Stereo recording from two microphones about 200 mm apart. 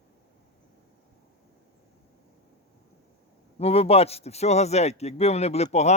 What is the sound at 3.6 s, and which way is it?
Speech, 30° left (ahead or behind).